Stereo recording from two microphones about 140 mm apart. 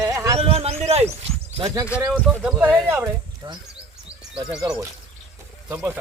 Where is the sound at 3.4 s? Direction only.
30° right (ahead or behind).